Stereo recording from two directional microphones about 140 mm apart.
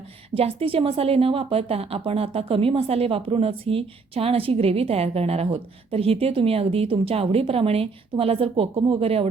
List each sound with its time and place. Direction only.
0.3 s a woman's voice: 40° right (ahead or behind)